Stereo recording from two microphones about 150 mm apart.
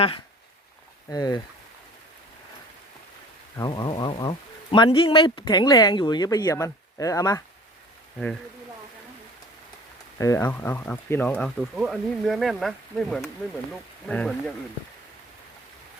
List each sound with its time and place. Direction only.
1.1 s speech: 25° left (ahead or behind)
3.6 s speech: 30° left (ahead or behind)
10.2 s speech: 20° left (ahead or behind)